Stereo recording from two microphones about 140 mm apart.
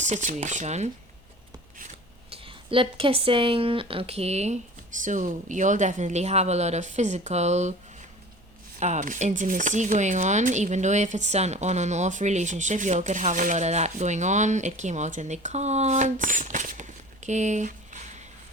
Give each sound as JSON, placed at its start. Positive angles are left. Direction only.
{"t": 0.0, "sound": "speech", "side_deg": -60}
{"t": 2.3, "sound": "speech", "side_deg": -40}
{"t": 8.8, "sound": "speech", "side_deg": -60}
{"t": 17.2, "sound": "a sound", "side_deg": -55}